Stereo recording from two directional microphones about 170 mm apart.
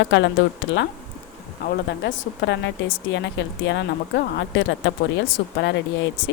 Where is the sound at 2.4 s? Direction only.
90° left.